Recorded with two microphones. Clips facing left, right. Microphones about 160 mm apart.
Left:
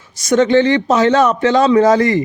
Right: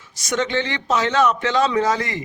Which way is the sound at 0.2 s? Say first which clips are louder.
Left 11 dB; 40° left (ahead or behind).